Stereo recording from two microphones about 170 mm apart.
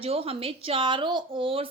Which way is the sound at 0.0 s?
35° right (ahead or behind).